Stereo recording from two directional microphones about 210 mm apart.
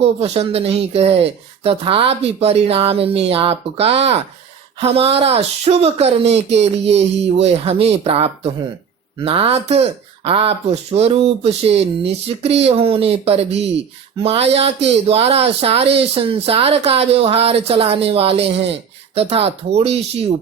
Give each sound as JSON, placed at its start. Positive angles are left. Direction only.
{"t": 0.0, "sound": "speech", "side_deg": -30}